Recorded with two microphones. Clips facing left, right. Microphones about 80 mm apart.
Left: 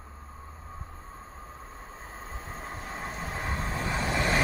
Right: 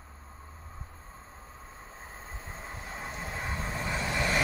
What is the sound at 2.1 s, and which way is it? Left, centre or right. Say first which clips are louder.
Train: left 4 dB; left.